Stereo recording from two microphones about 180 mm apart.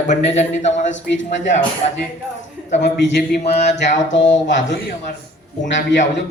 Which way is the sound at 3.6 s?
65° left (ahead or behind).